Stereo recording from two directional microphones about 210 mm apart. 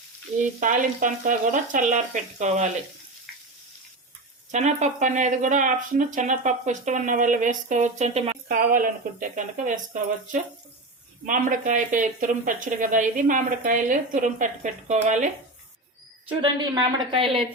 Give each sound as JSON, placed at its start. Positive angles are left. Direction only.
{"t": 0.6, "sound": "speech", "side_deg": -40}
{"t": 4.5, "sound": "speech", "side_deg": -35}
{"t": 16.6, "sound": "a woman's voice", "side_deg": -20}